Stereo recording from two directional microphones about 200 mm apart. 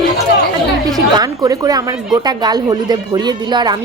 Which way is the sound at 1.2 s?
20° right (ahead or behind).